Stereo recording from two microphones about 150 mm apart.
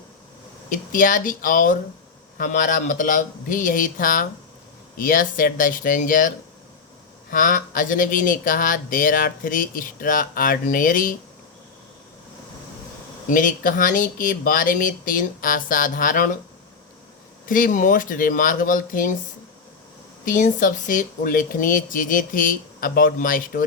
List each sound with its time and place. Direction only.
0.7 s speech: 60° left (ahead or behind)
13.3 s speech: 60° left (ahead or behind)
17.4 s speech: 65° left (ahead or behind)
20.2 s speech: 60° left (ahead or behind)